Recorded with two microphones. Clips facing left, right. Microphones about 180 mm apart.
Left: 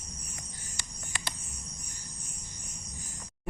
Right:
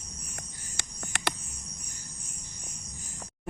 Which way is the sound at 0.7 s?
70° right (ahead or behind).